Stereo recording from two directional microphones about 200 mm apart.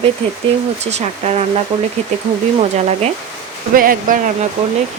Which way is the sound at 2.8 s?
35° right (ahead or behind).